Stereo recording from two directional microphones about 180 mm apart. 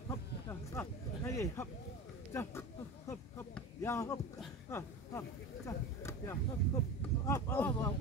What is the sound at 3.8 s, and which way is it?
Speech, 15° left (ahead or behind).